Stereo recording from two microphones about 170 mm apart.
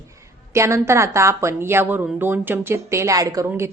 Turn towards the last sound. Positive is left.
turn(degrees=-20)  # may be behind; listen again after turning